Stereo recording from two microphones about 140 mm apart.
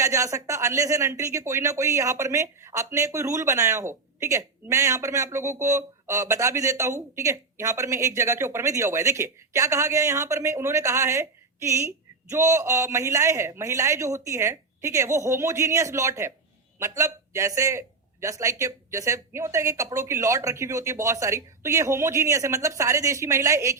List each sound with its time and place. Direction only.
0.0 s speech: 25° right (ahead or behind)